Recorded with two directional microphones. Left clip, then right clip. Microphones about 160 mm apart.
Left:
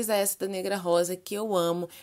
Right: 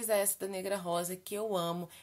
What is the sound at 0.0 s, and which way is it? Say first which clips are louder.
Speech: left 5 dB; 40° left (ahead or behind).